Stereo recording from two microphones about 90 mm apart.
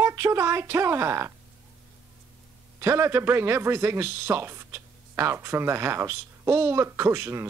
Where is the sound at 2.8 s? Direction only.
30° right (ahead or behind).